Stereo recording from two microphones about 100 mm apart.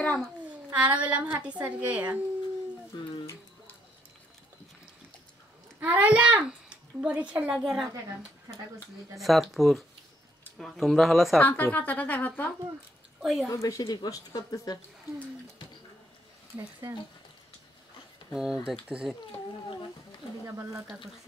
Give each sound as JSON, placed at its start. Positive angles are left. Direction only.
{"t": 0.7, "sound": "a woman's voice", "side_deg": -15}
{"t": 5.8, "sound": "a child's voice", "side_deg": -15}
{"t": 11.3, "sound": "a woman's voice", "side_deg": 15}
{"t": 13.2, "sound": "a woman's voice", "side_deg": 0}
{"t": 13.5, "sound": "a woman's voice", "side_deg": 35}
{"t": 18.3, "sound": "a woman's voice", "side_deg": -5}
{"t": 20.4, "sound": "speech", "side_deg": -30}